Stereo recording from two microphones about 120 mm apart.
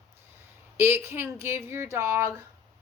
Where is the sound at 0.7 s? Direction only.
20° right (ahead or behind).